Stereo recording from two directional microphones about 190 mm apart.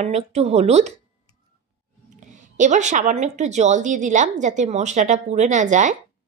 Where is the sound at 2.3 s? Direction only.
40° right (ahead or behind).